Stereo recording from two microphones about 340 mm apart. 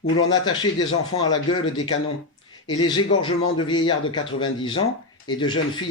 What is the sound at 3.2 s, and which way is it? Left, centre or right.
Speech, centre.